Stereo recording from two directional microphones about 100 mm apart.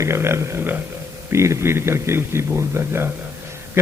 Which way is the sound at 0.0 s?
25° right (ahead or behind).